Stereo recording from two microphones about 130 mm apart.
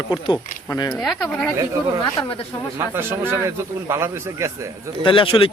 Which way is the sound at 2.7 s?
20° right (ahead or behind).